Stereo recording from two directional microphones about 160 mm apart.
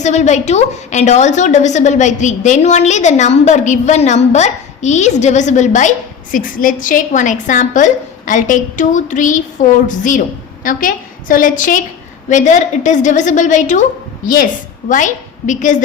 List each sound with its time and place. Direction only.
0.0 s a woman's voice: 45° left (ahead or behind)